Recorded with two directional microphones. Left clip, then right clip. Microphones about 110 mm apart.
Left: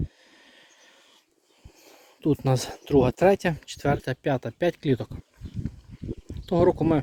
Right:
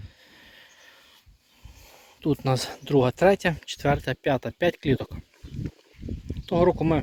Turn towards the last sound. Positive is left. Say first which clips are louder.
# even
turn(degrees=60)  # may be behind; listen again after turning